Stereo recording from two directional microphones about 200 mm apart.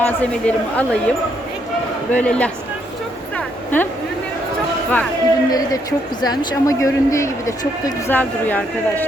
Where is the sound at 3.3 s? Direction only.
10° left (ahead or behind).